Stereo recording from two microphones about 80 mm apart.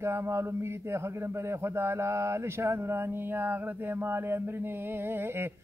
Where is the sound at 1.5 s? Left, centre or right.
Right.